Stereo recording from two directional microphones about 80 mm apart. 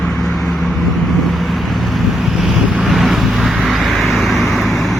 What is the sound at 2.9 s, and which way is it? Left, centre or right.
Vehicle, centre.